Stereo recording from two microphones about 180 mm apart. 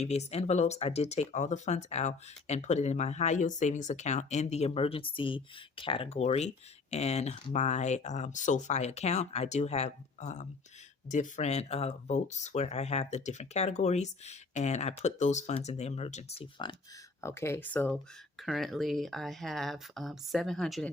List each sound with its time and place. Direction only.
0.0 s speech: 40° left (ahead or behind)
17.2 s speech: 15° left (ahead or behind)